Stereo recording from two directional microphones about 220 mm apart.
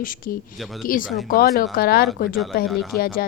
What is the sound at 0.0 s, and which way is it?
A woman's voice, 40° left (ahead or behind).